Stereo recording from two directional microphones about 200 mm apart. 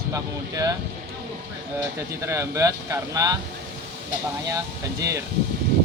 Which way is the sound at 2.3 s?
15° right (ahead or behind).